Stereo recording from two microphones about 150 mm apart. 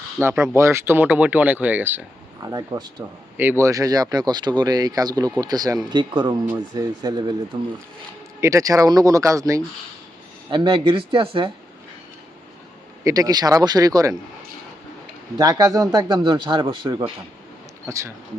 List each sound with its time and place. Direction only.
0.2 s speech: 15° right (ahead or behind)
2.5 s speech: 25° right (ahead or behind)
3.3 s speech: 15° right (ahead or behind)
10.5 s speech: 30° right (ahead or behind)
13.1 s speech: 25° right (ahead or behind)
15.4 s speech: 25° right (ahead or behind)
17.8 s speech: 20° right (ahead or behind)